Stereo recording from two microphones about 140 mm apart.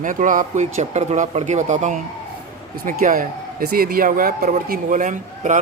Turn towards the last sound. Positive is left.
turn(degrees=-65)  # may be behind; listen again after turning